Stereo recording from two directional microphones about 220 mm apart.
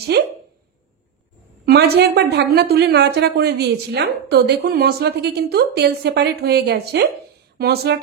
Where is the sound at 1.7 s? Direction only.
45° right (ahead or behind).